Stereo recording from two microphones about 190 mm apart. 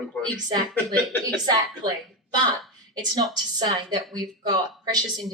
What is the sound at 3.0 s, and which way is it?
A woman's voice, 20° right (ahead or behind).